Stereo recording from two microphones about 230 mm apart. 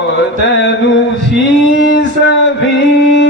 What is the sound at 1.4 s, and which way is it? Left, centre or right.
Male singing, left.